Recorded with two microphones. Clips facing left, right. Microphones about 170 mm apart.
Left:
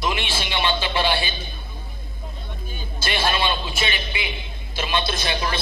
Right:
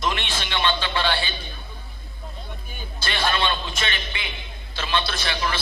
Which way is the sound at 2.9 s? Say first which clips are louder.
Left 1 dB; 15° left (ahead or behind).